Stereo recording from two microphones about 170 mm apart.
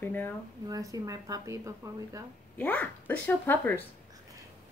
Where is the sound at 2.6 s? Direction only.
10° left (ahead or behind).